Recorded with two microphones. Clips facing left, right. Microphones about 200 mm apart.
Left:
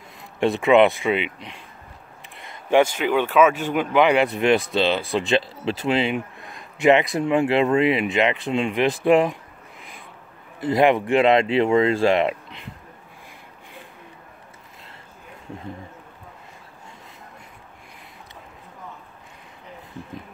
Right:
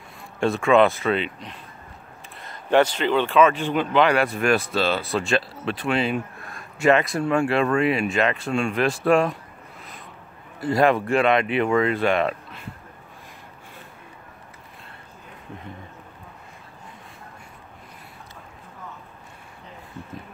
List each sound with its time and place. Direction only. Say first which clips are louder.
0.4 s speech: left 2 dB; 20° left (ahead or behind)
9.0 s a sound: left 2 dB; 15° left (ahead or behind)
10.6 s speech: left 1 dB; 20° left (ahead or behind)